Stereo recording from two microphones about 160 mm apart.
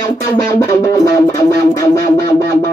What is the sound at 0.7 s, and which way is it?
Music, 20° left (ahead or behind).